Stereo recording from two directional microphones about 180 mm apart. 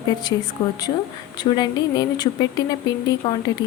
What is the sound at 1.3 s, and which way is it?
Speech, 25° left (ahead or behind).